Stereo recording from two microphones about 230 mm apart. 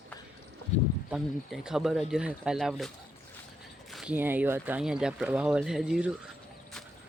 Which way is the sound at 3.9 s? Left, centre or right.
Centre.